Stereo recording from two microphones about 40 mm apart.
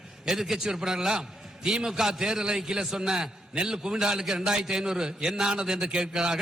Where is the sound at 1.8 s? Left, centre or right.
Centre.